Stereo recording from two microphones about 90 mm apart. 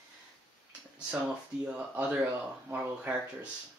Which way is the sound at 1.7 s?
15° right (ahead or behind).